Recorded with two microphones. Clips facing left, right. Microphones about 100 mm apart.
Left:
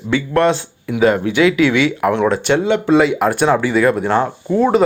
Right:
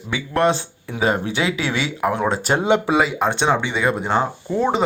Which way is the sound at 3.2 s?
25° right (ahead or behind).